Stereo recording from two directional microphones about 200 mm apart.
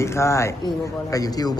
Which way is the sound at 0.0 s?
15° left (ahead or behind).